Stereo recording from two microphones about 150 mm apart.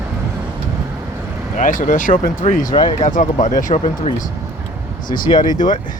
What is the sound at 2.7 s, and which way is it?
Speech, 35° left (ahead or behind).